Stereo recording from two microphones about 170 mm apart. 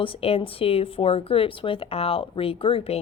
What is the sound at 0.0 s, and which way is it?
A woman's voice, 30° left (ahead or behind).